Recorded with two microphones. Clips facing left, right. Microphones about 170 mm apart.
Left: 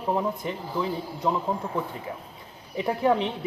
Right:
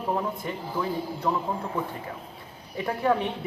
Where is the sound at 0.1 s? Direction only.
15° left (ahead or behind).